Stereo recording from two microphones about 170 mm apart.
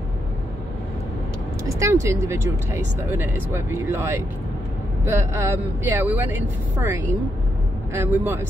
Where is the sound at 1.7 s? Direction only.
20° right (ahead or behind).